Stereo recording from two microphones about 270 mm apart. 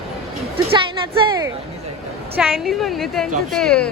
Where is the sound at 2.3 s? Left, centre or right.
Centre.